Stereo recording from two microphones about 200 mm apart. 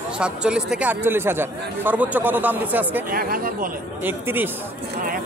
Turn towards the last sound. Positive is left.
turn(degrees=-10)  # may be behind; listen again after turning